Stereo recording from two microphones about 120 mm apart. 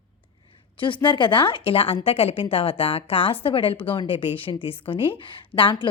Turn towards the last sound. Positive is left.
turn(degrees=45)  # may be behind; listen again after turning